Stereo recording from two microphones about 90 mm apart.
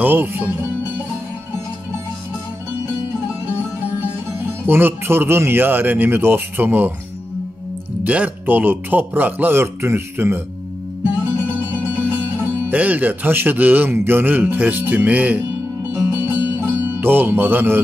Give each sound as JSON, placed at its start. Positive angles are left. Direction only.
{"t": 0.0, "sound": "speech", "side_deg": -25}
{"t": 4.6, "sound": "speech", "side_deg": -25}
{"t": 8.0, "sound": "speech", "side_deg": -20}
{"t": 11.9, "sound": "speech", "side_deg": -20}
{"t": 15.9, "sound": "music", "side_deg": -25}